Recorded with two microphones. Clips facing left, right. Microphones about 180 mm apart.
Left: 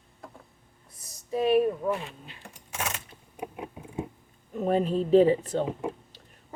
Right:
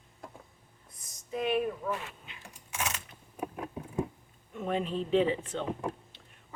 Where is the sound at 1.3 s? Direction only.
30° left (ahead or behind).